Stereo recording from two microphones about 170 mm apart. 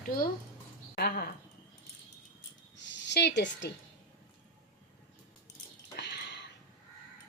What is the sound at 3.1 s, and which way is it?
Speech, 85° left.